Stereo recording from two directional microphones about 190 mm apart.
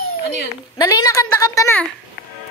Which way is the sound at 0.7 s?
20° left (ahead or behind).